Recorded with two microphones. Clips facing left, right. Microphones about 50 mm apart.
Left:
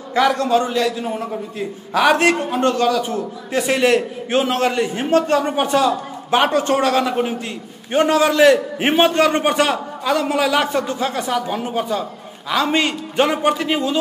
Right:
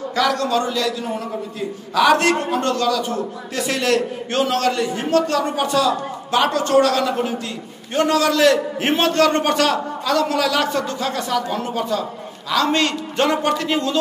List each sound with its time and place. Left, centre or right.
0.1 s a man's voice: left